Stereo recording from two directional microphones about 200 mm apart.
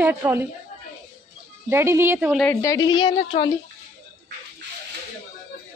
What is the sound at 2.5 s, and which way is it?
Speech, 15° left (ahead or behind).